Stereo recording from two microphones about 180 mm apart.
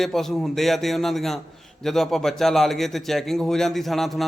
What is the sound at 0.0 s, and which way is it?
A man's voice, centre (ahead or behind).